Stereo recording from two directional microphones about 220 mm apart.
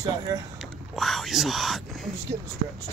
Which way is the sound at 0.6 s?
Centre (ahead or behind).